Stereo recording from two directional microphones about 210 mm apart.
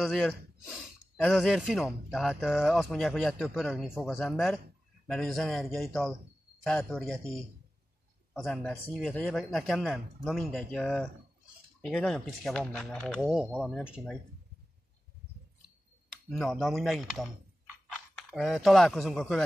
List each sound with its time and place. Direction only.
0.0 s speech: centre (ahead or behind)
16.3 s speech: centre (ahead or behind)